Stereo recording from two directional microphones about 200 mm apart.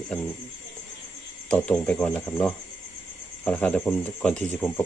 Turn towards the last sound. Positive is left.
turn(degrees=5)  # may be behind; listen again after turning